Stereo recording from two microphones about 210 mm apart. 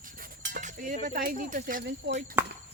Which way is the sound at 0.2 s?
45° right (ahead or behind).